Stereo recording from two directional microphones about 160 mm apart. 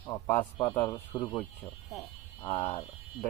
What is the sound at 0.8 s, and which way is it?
Speech, 20° left (ahead or behind).